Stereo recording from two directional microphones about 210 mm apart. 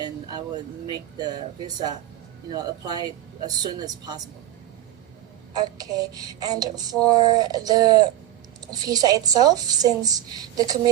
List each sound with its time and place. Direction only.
0.0 s a woman's voice: 20° right (ahead or behind)
5.5 s a woman's voice: 15° right (ahead or behind)